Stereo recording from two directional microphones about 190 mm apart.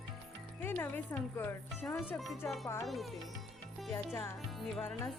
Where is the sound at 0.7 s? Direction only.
10° left (ahead or behind).